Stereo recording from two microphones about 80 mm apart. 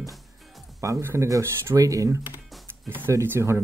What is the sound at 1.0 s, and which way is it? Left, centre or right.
Speech, right.